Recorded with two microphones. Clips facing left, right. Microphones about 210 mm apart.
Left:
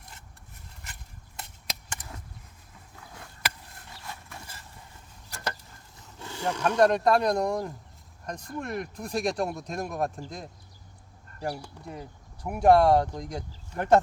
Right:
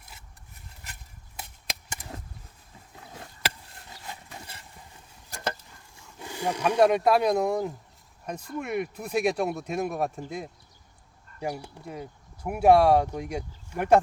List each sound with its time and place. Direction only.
2.9 s a sound: 25° right (ahead or behind)
4.0 s dog: 20° right (ahead or behind)
6.1 s speech: 15° right (ahead or behind)